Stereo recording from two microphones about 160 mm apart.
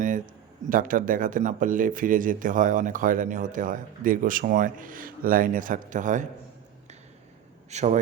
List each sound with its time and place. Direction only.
0.7 s speech: 60° right (ahead or behind)
7.7 s a man's voice: 45° right (ahead or behind)